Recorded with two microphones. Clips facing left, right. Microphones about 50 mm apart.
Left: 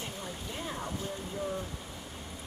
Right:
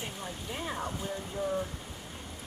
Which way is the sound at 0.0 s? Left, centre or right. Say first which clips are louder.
Right 1 dB; centre.